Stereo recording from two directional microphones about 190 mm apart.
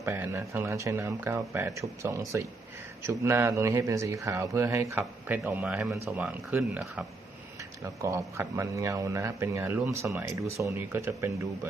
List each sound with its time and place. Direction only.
0.0 s speech: 15° right (ahead or behind)
8.0 s speech: 15° right (ahead or behind)